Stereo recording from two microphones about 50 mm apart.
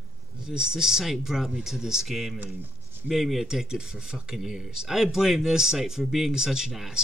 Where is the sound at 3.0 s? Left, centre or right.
Centre.